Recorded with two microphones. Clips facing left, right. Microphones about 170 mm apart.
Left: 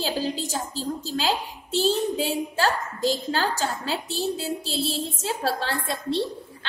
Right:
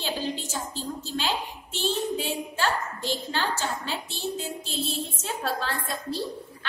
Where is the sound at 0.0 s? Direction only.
35° left (ahead or behind).